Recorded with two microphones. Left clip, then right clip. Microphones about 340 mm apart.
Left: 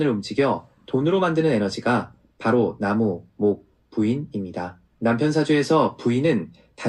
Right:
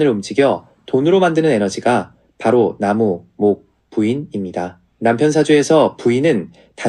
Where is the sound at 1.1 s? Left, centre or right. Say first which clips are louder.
Right 7 dB; right.